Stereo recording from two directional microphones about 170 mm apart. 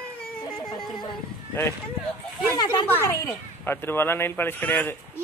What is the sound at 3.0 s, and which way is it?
Speech, 10° left (ahead or behind).